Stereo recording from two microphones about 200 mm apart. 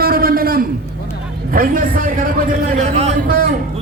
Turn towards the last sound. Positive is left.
turn(degrees=-45)  # may be behind; listen again after turning